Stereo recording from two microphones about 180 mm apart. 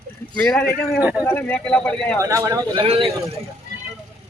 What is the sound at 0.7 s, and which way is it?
Speech, 10° right (ahead or behind).